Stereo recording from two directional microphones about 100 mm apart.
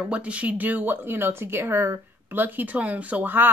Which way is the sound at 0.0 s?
10° right (ahead or behind).